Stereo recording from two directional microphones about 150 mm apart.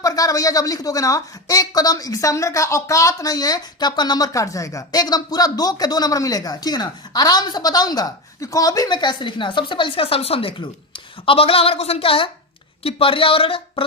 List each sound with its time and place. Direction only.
0.0 s a woman's voice: 25° left (ahead or behind)